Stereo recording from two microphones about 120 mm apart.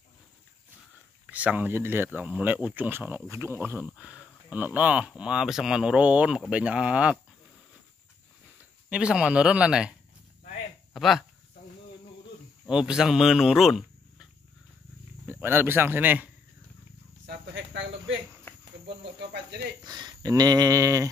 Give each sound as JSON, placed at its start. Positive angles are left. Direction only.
{"t": 1.3, "sound": "speech", "side_deg": -10}
{"t": 8.8, "sound": "speech", "side_deg": -10}
{"t": 12.6, "sound": "speech", "side_deg": -5}
{"t": 15.2, "sound": "speech", "side_deg": -15}
{"t": 19.8, "sound": "a sound", "side_deg": -35}